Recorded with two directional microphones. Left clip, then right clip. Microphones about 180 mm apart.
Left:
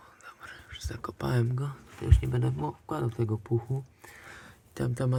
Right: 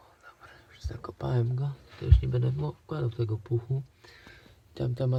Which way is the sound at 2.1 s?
35° left (ahead or behind).